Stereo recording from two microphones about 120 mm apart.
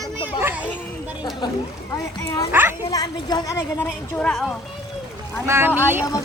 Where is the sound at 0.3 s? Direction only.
20° right (ahead or behind).